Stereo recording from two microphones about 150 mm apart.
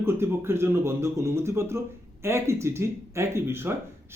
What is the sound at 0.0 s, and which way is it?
Speech, 15° right (ahead or behind).